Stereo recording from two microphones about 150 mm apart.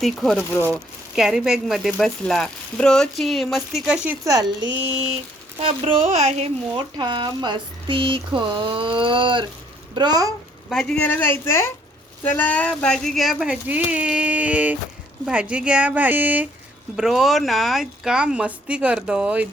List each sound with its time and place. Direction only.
0.0 s speech: centre (ahead or behind)
4.2 s speech: 25° right (ahead or behind)
5.5 s speech: 40° right (ahead or behind)
6.7 s speech: 30° right (ahead or behind)
10.7 s a woman's voice: 5° left (ahead or behind)